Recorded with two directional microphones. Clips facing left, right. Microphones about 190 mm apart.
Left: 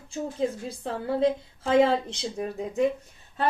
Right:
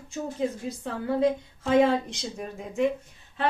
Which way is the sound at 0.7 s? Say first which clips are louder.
Even; 30° left (ahead or behind).